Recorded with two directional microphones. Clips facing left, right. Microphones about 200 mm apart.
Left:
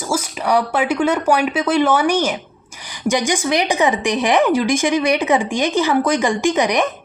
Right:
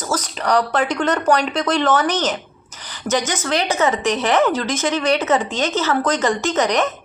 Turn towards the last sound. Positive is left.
turn(degrees=10)  # may be behind; listen again after turning